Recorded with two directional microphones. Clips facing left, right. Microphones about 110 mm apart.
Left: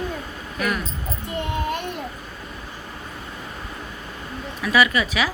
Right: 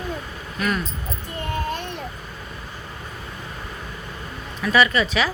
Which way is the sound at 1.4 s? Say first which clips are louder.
Left 1 dB; 15° left (ahead or behind).